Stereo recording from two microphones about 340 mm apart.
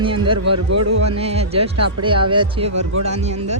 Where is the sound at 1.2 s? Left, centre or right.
Centre.